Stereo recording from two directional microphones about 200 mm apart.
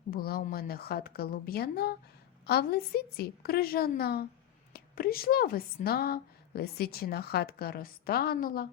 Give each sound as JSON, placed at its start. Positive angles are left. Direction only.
{"t": 0.1, "sound": "a woman's voice", "side_deg": 50}